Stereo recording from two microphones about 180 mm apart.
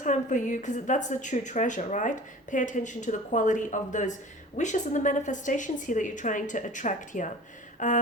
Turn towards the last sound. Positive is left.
turn(degrees=45)  # may be behind; listen again after turning